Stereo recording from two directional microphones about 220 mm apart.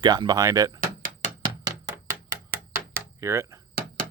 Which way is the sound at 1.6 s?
15° right (ahead or behind).